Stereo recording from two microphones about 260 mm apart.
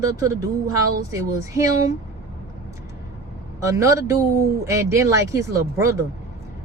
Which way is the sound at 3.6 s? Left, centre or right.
Centre.